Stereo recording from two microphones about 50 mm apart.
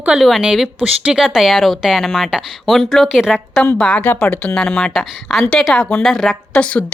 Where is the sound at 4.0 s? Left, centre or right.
Left.